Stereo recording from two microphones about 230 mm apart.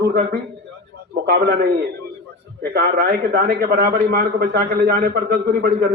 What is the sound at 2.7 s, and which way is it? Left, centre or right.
A man's voice, right.